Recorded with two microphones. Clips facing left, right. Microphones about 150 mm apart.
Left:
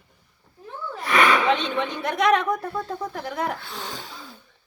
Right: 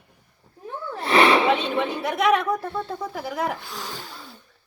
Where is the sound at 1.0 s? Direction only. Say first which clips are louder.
Right 3 dB; 30° right (ahead or behind).